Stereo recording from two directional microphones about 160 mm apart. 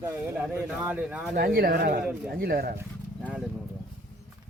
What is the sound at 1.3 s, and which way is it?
Speech, 70° right (ahead or behind).